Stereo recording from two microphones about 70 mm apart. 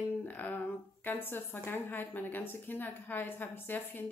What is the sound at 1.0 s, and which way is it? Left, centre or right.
Speech, left.